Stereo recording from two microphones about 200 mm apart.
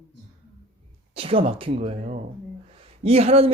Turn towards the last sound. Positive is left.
turn(degrees=-30)  # may be behind; listen again after turning